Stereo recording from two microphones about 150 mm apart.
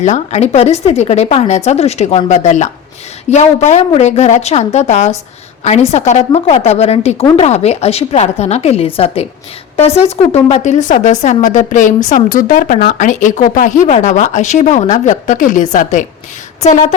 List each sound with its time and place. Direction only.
0.0 s a woman's voice: 50° left (ahead or behind)